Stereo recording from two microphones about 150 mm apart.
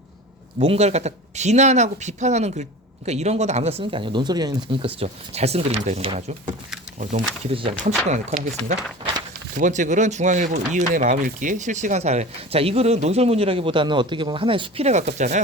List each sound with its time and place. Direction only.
0.6 s speech: 40° right (ahead or behind)
4.7 s speech: 40° right (ahead or behind)
6.1 s speech: 55° right (ahead or behind); by 7.9 s 40° right (ahead or behind)
8.1 s speech: 55° right (ahead or behind)